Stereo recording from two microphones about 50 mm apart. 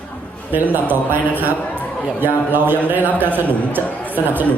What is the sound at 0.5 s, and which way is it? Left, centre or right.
Speech, right.